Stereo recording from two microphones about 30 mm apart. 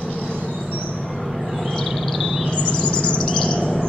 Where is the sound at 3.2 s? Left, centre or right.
Left.